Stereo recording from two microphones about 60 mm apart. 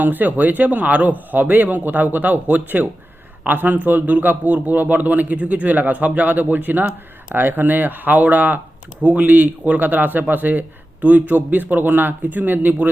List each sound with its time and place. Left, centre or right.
0.0 s a man's voice: right